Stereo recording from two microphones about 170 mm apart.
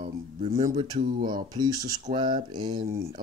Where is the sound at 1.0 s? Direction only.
55° right (ahead or behind).